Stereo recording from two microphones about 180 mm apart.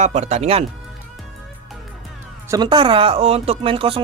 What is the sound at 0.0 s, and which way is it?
Speech, 40° right (ahead or behind).